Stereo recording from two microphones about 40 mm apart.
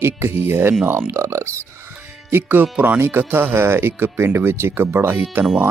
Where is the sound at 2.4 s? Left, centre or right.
Right.